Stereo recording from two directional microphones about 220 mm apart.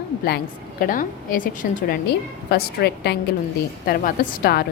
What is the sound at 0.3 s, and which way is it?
A woman's voice, 45° left (ahead or behind).